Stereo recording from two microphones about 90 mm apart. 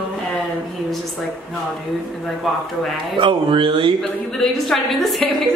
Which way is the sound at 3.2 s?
70° right (ahead or behind).